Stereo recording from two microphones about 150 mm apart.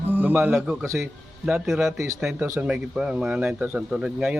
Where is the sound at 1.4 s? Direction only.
5° right (ahead or behind).